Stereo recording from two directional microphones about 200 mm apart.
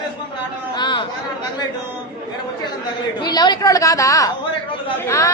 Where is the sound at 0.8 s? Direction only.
25° left (ahead or behind).